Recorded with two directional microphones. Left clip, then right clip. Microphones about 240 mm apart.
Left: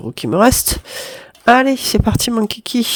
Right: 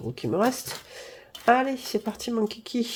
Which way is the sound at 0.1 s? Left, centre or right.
Left.